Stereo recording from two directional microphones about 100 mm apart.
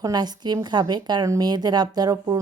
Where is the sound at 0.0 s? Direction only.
40° right (ahead or behind).